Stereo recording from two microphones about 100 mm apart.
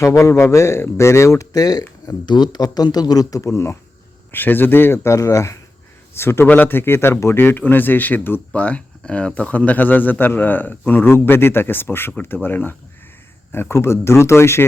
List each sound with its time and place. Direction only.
0.0 s a man's voice: 30° left (ahead or behind)
2.2 s speech: 45° left (ahead or behind); by 3.8 s 30° left (ahead or behind)
4.3 s a man's voice: 20° left (ahead or behind)